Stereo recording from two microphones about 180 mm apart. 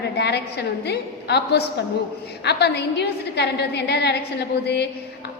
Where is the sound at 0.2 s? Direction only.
70° left (ahead or behind).